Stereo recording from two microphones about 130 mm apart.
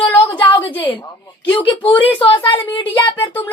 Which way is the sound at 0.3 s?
40° left (ahead or behind).